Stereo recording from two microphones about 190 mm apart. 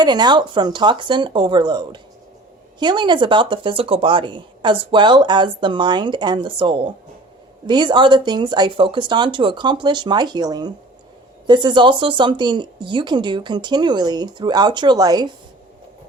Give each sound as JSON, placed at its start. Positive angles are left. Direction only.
{"t": 0.0, "sound": "speech", "side_deg": -20}